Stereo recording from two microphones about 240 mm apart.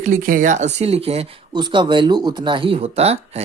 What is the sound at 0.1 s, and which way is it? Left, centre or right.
Speech, right.